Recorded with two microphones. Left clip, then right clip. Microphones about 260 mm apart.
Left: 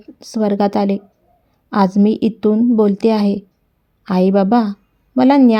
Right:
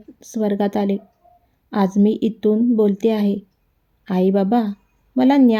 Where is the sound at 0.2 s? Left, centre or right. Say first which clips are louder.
Left 4 dB; centre.